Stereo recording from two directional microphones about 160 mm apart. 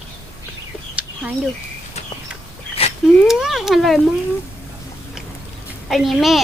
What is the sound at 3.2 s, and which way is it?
Speech, 5° right (ahead or behind).